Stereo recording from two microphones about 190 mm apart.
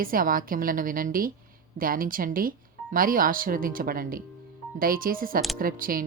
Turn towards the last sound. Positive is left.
turn(degrees=-50)  # may be behind; listen again after turning